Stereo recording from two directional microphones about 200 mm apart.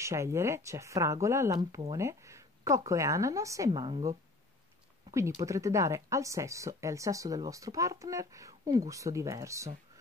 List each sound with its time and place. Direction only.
0.0 s speech: 15° right (ahead or behind)
5.1 s speech: 15° right (ahead or behind)